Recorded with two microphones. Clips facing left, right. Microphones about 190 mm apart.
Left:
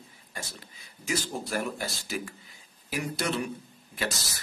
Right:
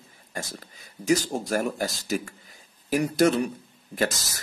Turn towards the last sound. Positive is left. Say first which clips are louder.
# right 7 dB
turn(degrees=-45)  # may be behind; listen again after turning